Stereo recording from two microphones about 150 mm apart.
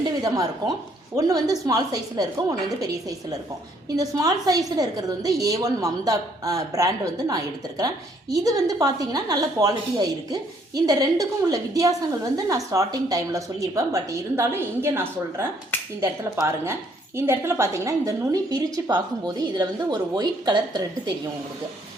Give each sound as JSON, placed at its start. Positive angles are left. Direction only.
{"t": 0.0, "sound": "a sound", "side_deg": -25}
{"t": 1.1, "sound": "a woman's voice", "side_deg": -25}
{"t": 3.8, "sound": "a woman's voice", "side_deg": -25}